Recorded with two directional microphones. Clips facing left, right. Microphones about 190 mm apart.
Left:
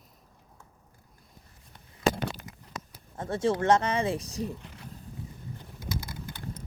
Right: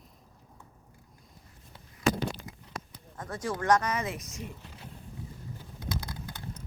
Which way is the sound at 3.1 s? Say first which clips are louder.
Left 7 dB; 25° left (ahead or behind).